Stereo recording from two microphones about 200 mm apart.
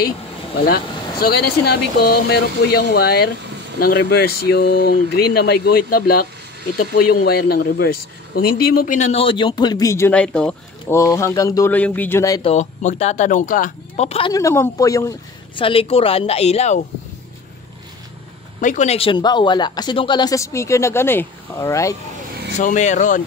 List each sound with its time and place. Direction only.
1.2 s speech: 55° left (ahead or behind); by 11.0 s 5° left (ahead or behind)
11.0 s speech: 15° left (ahead or behind)
12.4 s speech: 35° left (ahead or behind)
14.3 s speech: 15° left (ahead or behind)
15.6 s speech: 30° left (ahead or behind)
18.6 s speech: 40° left (ahead or behind); by 21.9 s 15° left (ahead or behind)
22.6 s speech: 40° left (ahead or behind)